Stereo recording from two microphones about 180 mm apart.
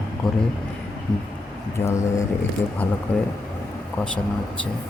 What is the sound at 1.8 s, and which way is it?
Speech, 15° left (ahead or behind).